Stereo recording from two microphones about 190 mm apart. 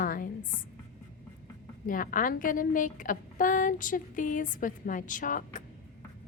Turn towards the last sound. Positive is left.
turn(degrees=45)  # may be behind; listen again after turning